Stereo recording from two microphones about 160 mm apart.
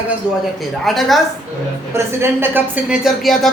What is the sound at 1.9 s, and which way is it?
Speech, 15° right (ahead or behind).